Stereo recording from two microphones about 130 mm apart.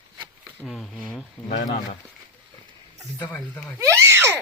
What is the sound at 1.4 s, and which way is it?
Speech, 70° left (ahead or behind).